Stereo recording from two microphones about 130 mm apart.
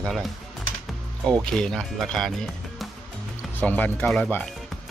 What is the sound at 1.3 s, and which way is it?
Speech, 5° left (ahead or behind).